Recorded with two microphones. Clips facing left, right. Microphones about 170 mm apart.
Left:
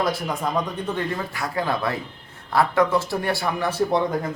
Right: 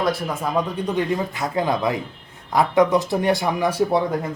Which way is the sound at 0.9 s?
15° right (ahead or behind).